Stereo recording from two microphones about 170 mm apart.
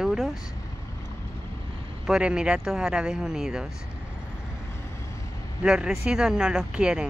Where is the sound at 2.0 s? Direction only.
5° right (ahead or behind).